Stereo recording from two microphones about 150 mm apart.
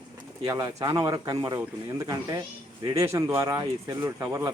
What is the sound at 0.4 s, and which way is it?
A man's voice, 20° right (ahead or behind).